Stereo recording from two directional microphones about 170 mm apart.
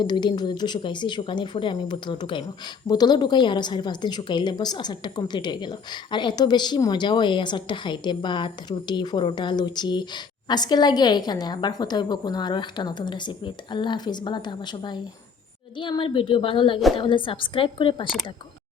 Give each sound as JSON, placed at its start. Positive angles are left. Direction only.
{"t": 0.0, "sound": "a woman's voice", "side_deg": 25}